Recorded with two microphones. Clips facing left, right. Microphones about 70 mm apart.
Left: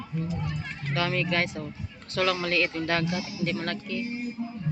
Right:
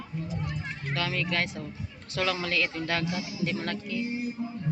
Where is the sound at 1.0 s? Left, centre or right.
Centre.